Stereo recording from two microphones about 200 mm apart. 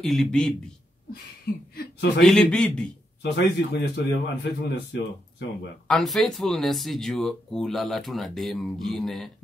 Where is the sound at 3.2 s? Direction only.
60° left (ahead or behind).